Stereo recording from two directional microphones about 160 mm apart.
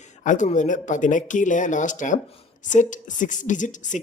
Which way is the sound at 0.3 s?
50° left (ahead or behind).